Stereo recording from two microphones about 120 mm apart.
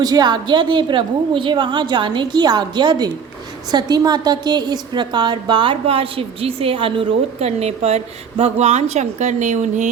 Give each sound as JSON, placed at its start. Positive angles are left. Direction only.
{"t": 0.0, "sound": "a woman's voice", "side_deg": -35}